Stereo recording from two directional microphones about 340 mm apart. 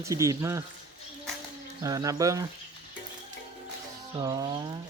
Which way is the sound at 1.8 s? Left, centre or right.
Centre.